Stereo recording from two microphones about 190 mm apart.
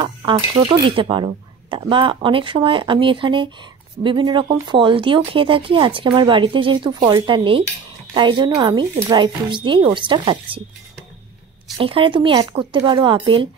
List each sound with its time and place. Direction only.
0.0 s speech: 25° right (ahead or behind)
11.8 s speech: 30° right (ahead or behind)